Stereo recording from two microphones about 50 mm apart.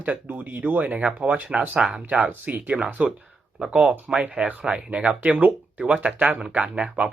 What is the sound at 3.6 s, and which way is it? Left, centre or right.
Speech, centre.